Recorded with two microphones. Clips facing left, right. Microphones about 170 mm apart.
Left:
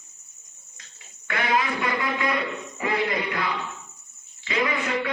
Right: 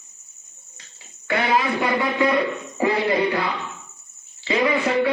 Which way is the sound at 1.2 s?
30° right (ahead or behind).